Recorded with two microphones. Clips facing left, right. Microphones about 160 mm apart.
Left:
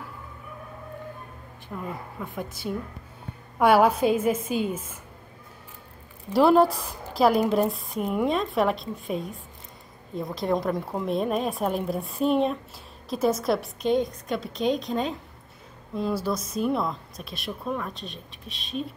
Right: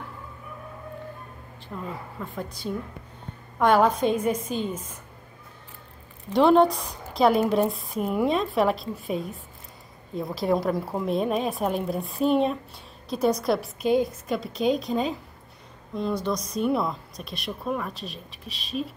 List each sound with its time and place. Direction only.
1.7 s a woman's voice: centre (ahead or behind)
2.2 s a woman's voice: 15° left (ahead or behind)
6.3 s a woman's voice: 5° left (ahead or behind)